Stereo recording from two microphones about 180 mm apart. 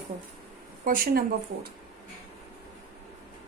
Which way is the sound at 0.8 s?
50° right (ahead or behind).